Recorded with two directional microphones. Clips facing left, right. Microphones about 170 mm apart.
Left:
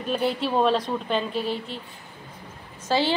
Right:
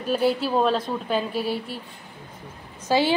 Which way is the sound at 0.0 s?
5° right (ahead or behind).